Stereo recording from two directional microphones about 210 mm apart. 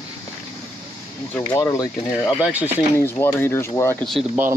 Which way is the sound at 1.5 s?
15° left (ahead or behind).